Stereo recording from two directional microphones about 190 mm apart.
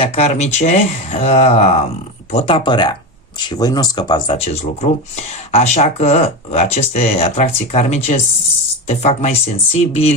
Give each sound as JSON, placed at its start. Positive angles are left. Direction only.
{"t": 0.0, "sound": "speech", "side_deg": 35}